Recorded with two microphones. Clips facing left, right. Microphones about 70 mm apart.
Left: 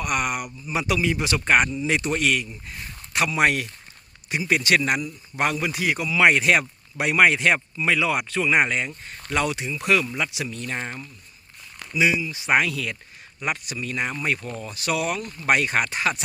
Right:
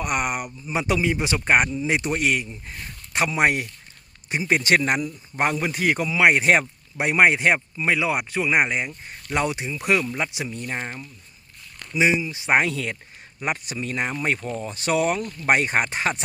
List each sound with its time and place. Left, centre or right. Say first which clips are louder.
0.0 s a man's voice: even; right
6.1 s speech: left 1 dB; right
6.4 s speech: right 1 dB; right
11.9 s a man's voice: right 1 dB; right